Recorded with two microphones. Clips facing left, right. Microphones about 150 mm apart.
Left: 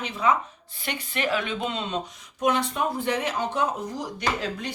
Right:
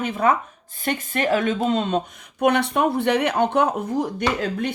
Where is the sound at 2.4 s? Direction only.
65° right (ahead or behind).